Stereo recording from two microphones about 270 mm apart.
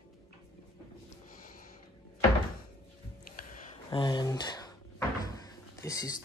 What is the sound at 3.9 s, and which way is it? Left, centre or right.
Speech, centre.